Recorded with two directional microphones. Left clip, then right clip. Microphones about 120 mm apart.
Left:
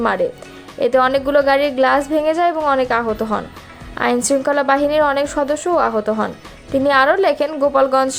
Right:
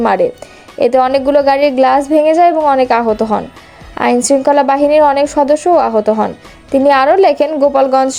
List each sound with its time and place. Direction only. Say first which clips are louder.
0.0 s a woman's voice: right 6 dB; 45° right (ahead or behind)